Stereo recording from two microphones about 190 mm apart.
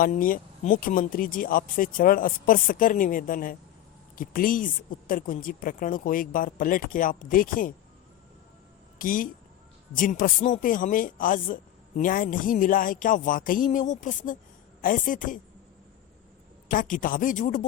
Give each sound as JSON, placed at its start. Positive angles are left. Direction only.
{"t": 0.0, "sound": "speech", "side_deg": 45}
{"t": 9.0, "sound": "speech", "side_deg": 45}
{"t": 16.6, "sound": "speech", "side_deg": 45}